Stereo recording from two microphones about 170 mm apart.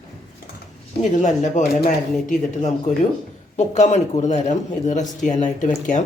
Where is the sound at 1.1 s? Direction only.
45° left (ahead or behind).